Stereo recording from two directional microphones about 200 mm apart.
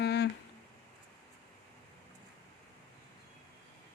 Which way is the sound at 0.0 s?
55° left (ahead or behind).